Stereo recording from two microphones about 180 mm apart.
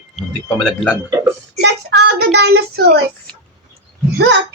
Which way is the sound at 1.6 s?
70° right (ahead or behind).